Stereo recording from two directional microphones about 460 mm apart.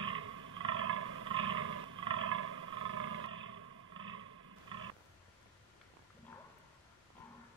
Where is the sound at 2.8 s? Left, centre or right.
Right.